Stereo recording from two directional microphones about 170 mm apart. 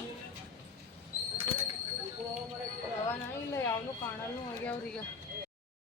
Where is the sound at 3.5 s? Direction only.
15° left (ahead or behind).